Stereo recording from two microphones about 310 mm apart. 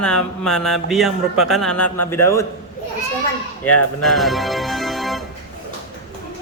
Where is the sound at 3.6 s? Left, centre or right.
Left.